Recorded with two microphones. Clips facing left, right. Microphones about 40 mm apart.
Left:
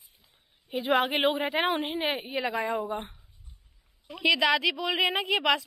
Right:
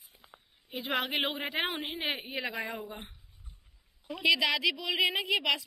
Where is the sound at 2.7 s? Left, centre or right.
Centre.